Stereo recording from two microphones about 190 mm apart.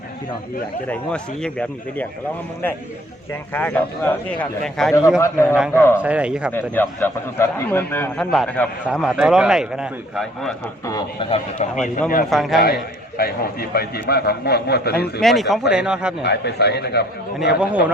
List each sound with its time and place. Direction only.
0.9 s a man's voice: 5° left (ahead or behind)
3.5 s a man's voice: 10° left (ahead or behind)
5.2 s a man's voice: 15° left (ahead or behind)
6.0 s speech: 5° right (ahead or behind)
6.5 s a man's voice: 10° left (ahead or behind)
10.8 s a man's voice: 25° left (ahead or behind)
12.3 s a man's voice: centre (ahead or behind)
12.5 s a man's voice: 55° left (ahead or behind)
15.2 s a man's voice: centre (ahead or behind)
16.2 s a man's voice: 60° left (ahead or behind)
17.6 s speech: 5° right (ahead or behind)